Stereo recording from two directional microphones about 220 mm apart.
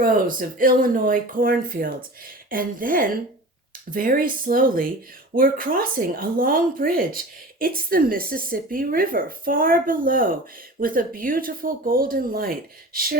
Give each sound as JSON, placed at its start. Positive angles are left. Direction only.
{"t": 0.0, "sound": "speech", "side_deg": -40}